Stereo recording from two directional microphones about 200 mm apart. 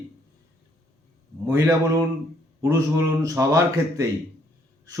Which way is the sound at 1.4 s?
15° right (ahead or behind).